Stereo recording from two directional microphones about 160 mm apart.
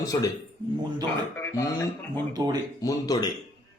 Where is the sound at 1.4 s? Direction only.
20° left (ahead or behind).